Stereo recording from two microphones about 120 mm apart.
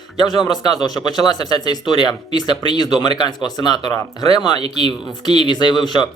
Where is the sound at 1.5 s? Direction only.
35° left (ahead or behind).